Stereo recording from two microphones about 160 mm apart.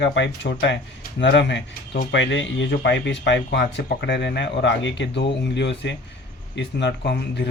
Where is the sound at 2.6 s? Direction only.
90° left.